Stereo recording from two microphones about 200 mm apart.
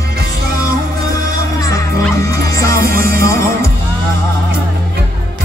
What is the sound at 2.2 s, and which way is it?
Music, 15° left (ahead or behind).